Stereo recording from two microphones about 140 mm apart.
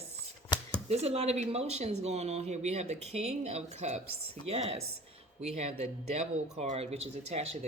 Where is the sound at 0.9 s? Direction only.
50° right (ahead or behind).